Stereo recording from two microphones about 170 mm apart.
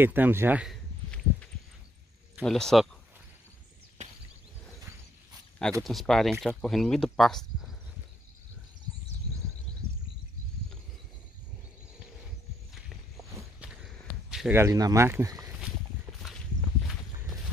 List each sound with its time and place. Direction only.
0.0 s speech: 10° right (ahead or behind)
2.4 s speech: 5° left (ahead or behind)
5.6 s speech: centre (ahead or behind)
13.6 s walk: centre (ahead or behind)
14.5 s speech: 20° right (ahead or behind)
16.2 s walk: centre (ahead or behind)